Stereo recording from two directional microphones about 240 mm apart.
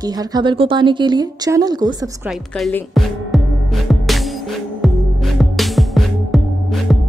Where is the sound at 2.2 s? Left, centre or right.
Centre.